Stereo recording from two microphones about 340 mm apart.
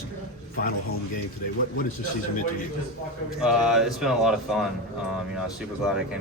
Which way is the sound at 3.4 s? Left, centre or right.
Centre.